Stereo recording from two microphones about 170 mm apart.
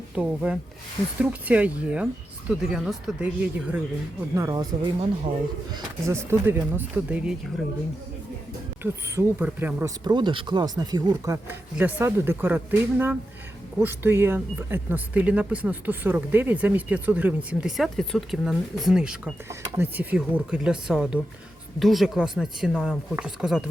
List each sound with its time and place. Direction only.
0.2 s speech: 5° right (ahead or behind)
4.4 s speech: 20° right (ahead or behind)
8.8 s speech: 15° right (ahead or behind)
10.0 s speech: 25° right (ahead or behind); by 23.6 s 5° right (ahead or behind)